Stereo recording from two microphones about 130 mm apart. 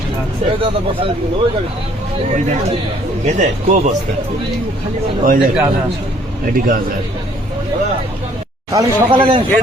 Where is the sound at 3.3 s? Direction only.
65° right (ahead or behind).